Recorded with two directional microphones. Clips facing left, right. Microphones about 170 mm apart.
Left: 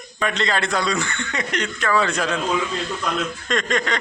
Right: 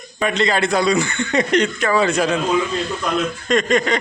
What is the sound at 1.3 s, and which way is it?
Speech, 25° right (ahead or behind).